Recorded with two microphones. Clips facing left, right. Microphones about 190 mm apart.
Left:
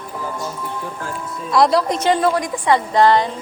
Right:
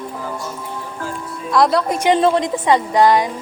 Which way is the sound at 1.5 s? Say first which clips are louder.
Even; centre (ahead or behind).